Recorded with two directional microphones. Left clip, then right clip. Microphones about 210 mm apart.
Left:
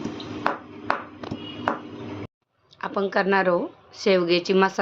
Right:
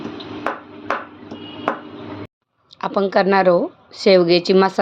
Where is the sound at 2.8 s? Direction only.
20° right (ahead or behind).